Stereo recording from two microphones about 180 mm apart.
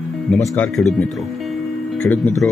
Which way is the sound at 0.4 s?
5° left (ahead or behind).